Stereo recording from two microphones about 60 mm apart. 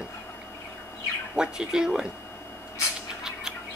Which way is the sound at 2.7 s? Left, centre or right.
Centre.